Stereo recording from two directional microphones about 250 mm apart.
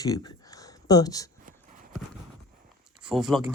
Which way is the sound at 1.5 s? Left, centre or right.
Right.